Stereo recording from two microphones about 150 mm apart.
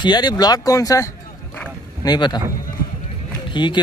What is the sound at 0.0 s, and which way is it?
Speech, 30° left (ahead or behind).